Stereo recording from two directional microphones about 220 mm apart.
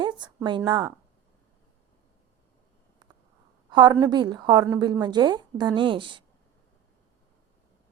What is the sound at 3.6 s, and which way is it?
A woman's voice, 20° right (ahead or behind).